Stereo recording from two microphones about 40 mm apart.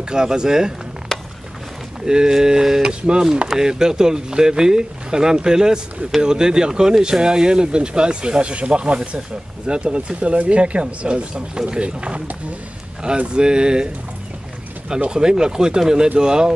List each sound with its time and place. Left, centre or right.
0.1 s speech: centre
1.1 s a sound: centre
2.0 s speech: centre
13.3 s speech: right
15.0 s speech: centre